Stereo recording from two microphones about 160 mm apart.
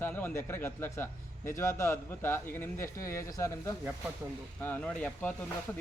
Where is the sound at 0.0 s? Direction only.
10° left (ahead or behind).